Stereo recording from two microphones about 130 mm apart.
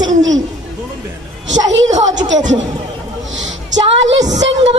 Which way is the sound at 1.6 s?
65° right (ahead or behind).